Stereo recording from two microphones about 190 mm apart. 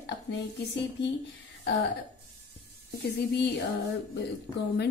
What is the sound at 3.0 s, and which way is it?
Speech, 60° left (ahead or behind).